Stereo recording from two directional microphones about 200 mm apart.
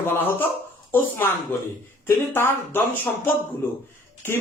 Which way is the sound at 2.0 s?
10° left (ahead or behind).